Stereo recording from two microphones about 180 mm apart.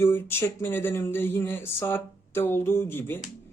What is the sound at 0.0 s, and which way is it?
Speech, 15° left (ahead or behind).